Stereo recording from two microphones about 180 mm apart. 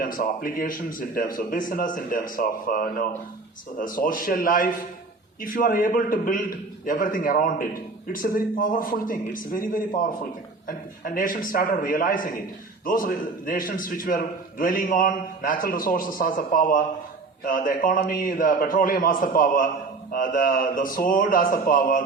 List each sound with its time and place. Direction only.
0.0 s a man's voice: 50° left (ahead or behind)